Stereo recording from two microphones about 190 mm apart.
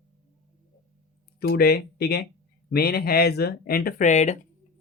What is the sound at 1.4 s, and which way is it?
Speech, 55° left (ahead or behind).